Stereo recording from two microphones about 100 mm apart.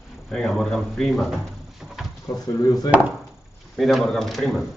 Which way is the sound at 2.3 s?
30° left (ahead or behind).